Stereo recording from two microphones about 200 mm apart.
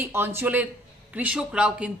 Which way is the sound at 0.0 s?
10° right (ahead or behind).